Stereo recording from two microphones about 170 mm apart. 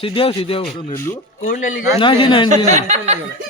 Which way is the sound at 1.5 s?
50° left (ahead or behind).